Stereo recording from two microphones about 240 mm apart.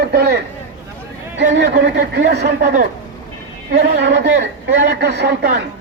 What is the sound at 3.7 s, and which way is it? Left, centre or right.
Speech, right.